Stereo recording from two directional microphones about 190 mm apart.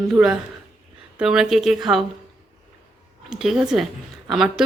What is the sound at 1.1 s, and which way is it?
Speech, 5° right (ahead or behind).